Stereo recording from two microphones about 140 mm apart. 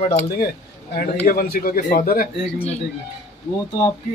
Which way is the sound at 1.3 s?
90° left.